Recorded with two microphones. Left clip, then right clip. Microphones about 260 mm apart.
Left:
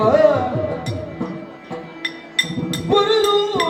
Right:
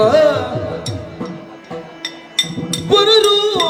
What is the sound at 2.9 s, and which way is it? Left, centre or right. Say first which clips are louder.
Music: right 5 dB; right.